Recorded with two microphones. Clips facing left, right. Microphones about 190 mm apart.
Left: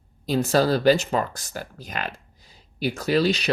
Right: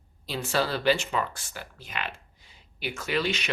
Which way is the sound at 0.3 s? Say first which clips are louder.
Left 8 dB; 40° left (ahead or behind).